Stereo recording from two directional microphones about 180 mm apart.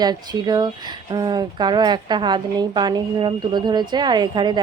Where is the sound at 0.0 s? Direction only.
20° right (ahead or behind).